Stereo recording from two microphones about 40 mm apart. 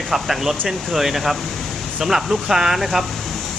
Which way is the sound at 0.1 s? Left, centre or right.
Centre.